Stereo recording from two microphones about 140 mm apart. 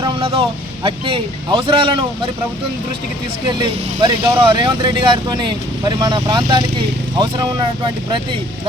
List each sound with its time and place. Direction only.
0.0 s speech: 40° right (ahead or behind)
3.4 s speech: 30° right (ahead or behind)